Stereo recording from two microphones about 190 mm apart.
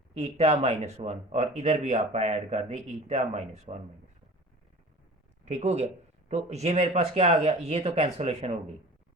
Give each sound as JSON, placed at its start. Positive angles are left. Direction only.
{"t": 0.1, "sound": "speech", "side_deg": -35}
{"t": 5.5, "sound": "speech", "side_deg": -35}